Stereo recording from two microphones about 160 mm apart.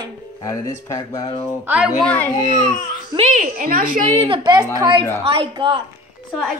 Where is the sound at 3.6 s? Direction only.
65° right (ahead or behind).